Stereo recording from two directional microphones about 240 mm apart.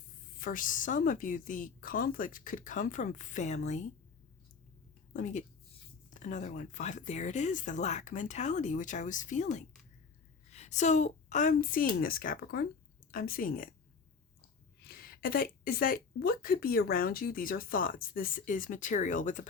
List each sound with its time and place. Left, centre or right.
0.3 s speech: left
5.1 s speech: left
14.8 s speech: left